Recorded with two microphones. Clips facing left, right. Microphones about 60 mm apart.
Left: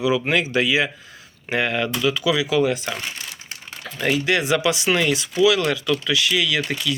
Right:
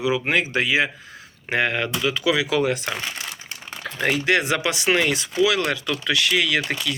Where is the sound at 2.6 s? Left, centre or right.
Right.